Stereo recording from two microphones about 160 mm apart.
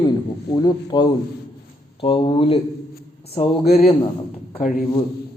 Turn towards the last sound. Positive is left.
turn(degrees=60)  # may be behind; listen again after turning